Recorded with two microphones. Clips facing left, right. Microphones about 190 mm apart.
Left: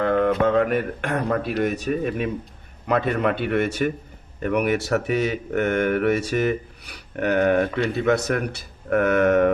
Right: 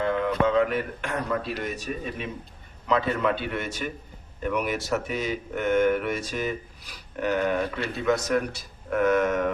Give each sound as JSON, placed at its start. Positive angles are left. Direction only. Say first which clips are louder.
{"t": 0.0, "sound": "speech", "louder": "left 5 dB", "side_deg": 55}